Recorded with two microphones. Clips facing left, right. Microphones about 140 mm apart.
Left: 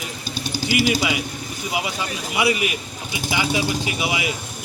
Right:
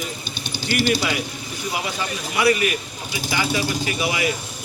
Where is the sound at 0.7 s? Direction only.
10° left (ahead or behind).